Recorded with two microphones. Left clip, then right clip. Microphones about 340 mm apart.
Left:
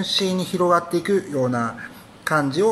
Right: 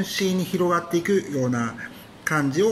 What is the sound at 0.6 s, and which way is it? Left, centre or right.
Speech, centre.